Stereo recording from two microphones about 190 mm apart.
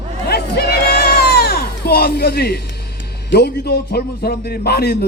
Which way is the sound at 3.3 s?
55° left (ahead or behind).